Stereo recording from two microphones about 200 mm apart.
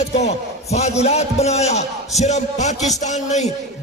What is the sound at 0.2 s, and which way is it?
A man's voice, 35° left (ahead or behind).